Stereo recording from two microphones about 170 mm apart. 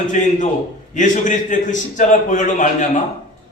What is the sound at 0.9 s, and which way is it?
A man's voice, 50° left (ahead or behind).